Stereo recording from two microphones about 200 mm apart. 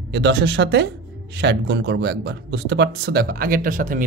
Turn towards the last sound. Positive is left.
turn(degrees=-40)  # may be behind; listen again after turning